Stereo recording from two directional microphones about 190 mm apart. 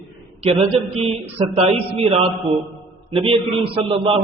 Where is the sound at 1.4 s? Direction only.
30° right (ahead or behind).